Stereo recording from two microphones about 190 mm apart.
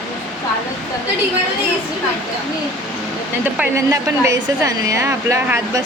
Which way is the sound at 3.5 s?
10° right (ahead or behind).